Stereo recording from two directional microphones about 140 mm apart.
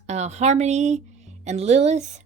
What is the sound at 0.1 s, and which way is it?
A woman's voice, 55° right (ahead or behind).